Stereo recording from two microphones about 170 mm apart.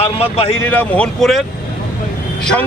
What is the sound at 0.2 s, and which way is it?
Speech, 35° left (ahead or behind).